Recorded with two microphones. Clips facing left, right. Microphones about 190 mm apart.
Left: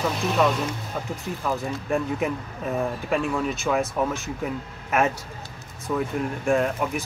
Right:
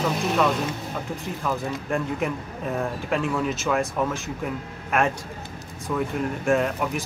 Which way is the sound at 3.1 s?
Centre (ahead or behind).